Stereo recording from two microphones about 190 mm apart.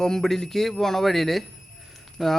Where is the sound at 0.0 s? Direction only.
5° left (ahead or behind).